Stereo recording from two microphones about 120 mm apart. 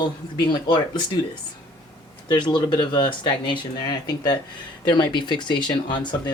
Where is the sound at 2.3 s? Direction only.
40° left (ahead or behind).